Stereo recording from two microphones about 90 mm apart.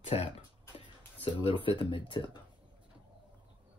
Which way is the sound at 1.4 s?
80° left.